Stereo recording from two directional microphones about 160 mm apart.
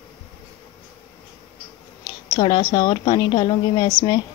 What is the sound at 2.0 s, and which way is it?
A woman's voice, 25° left (ahead or behind).